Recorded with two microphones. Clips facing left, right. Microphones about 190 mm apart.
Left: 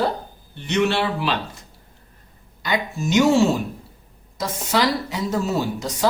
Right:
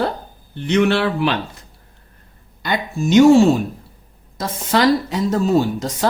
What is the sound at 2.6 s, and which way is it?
Speech, 55° right (ahead or behind).